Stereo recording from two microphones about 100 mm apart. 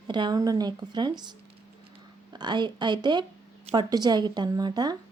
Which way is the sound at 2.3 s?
45° right (ahead or behind).